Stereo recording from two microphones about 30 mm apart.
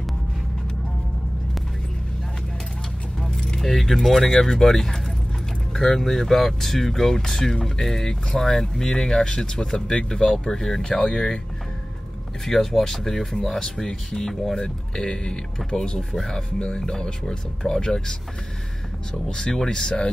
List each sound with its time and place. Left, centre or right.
3.3 s keys jangling: centre
3.8 s speech: centre
4.3 s speech: left
5.9 s speech: centre
12.4 s speech: centre
19.2 s speech: left